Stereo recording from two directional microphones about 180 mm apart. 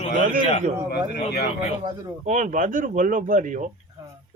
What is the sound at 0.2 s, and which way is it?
Speech, 50° right (ahead or behind).